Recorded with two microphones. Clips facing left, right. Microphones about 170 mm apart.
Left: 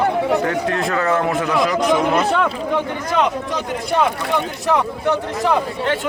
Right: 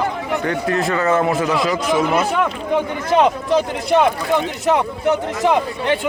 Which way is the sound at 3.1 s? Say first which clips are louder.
Right 6 dB; 30° right (ahead or behind).